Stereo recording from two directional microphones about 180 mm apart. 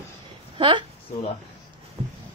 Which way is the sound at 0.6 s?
25° right (ahead or behind).